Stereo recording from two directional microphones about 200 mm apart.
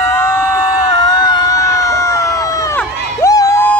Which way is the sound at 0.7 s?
20° left (ahead or behind).